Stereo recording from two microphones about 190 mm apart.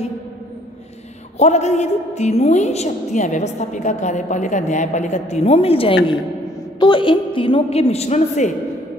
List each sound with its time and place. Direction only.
1.4 s a woman's voice: 35° left (ahead or behind)